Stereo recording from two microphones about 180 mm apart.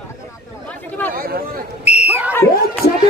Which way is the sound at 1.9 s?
35° left (ahead or behind).